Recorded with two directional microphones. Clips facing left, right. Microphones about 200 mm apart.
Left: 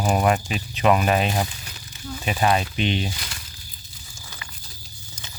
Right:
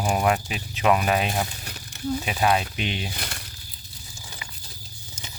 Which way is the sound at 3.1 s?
55° right (ahead or behind).